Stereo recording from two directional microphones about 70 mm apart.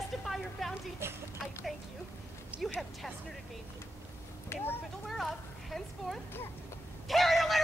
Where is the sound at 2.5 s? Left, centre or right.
Centre.